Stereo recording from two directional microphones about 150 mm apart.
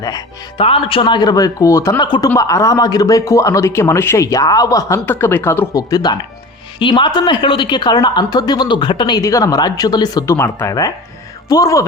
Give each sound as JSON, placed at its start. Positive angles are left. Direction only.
{"t": 0.0, "sound": "speech", "side_deg": 25}
{"t": 0.6, "sound": "speech", "side_deg": 35}
{"t": 10.3, "sound": "speech", "side_deg": 15}